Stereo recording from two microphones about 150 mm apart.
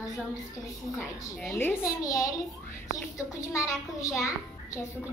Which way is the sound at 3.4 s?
20° left (ahead or behind).